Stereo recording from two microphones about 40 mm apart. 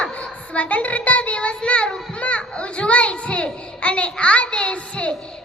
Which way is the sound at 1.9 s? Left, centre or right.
Left.